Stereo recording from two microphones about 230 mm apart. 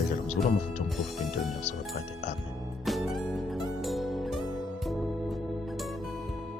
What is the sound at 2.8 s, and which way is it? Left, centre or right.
Music, centre.